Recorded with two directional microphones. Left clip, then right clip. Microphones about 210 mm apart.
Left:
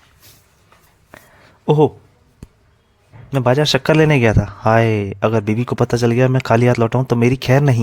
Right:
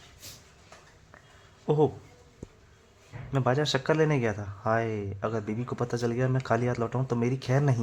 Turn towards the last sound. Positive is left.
turn(degrees=45)  # may be behind; listen again after turning